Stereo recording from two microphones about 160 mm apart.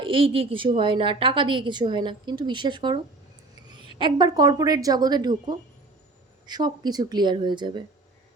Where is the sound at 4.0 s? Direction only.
25° right (ahead or behind).